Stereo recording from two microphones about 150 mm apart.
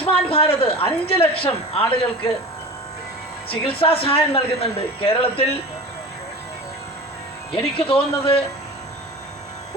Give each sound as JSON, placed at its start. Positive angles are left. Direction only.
{"t": 0.0, "sound": "a man's voice", "side_deg": 40}
{"t": 3.5, "sound": "speech", "side_deg": 40}
{"t": 7.5, "sound": "speech", "side_deg": 40}